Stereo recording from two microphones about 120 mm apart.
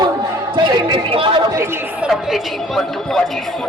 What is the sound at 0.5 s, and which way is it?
Speech, 40° right (ahead or behind).